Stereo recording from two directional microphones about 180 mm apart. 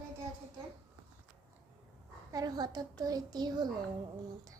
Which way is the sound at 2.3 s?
20° right (ahead or behind).